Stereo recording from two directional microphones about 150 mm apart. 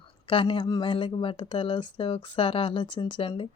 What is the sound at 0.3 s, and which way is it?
A woman's voice, 35° left (ahead or behind).